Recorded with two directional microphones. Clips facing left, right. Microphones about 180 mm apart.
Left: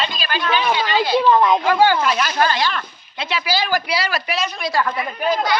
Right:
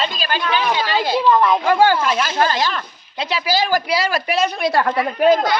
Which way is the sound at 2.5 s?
40° right (ahead or behind).